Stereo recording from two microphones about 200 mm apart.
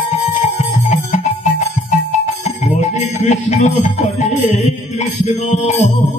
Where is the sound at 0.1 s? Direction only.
40° left (ahead or behind).